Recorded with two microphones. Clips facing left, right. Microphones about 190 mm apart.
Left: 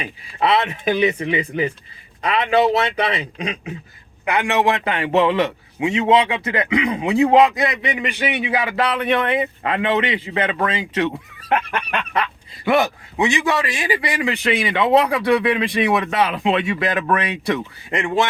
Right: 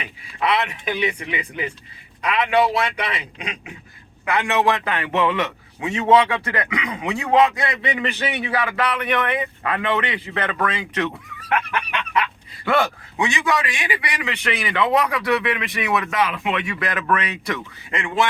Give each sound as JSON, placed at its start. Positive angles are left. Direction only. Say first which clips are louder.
{"t": 0.0, "sound": "a man's voice", "louder": "left 3 dB", "side_deg": 30}
{"t": 0.9, "sound": "speech", "louder": "left 6 dB", "side_deg": 40}
{"t": 2.2, "sound": "a man's voice", "louder": "left 2 dB", "side_deg": 25}
{"t": 4.3, "sound": "a man's voice", "louder": "left 1 dB", "side_deg": 20}
{"t": 5.9, "sound": "a man's voice", "louder": "even", "side_deg": 20}
{"t": 11.9, "sound": "fowl", "louder": "left 1 dB", "side_deg": 40}
{"t": 12.6, "sound": "a man's voice", "louder": "left 3 dB", "side_deg": 20}